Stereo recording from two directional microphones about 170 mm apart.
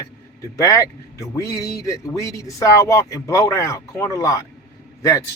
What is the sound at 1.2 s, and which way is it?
Speech, 20° left (ahead or behind).